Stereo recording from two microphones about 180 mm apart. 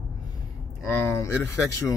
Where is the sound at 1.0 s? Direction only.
15° left (ahead or behind).